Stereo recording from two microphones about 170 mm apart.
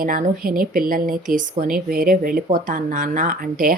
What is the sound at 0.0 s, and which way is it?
Speech, 55° right (ahead or behind).